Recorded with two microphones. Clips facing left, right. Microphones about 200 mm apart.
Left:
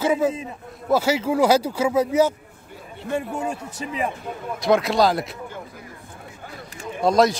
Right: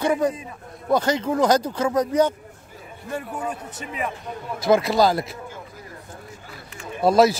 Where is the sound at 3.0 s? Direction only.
25° left (ahead or behind).